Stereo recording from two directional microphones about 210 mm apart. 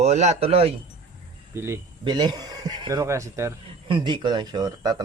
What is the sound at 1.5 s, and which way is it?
A man's voice, 15° right (ahead or behind).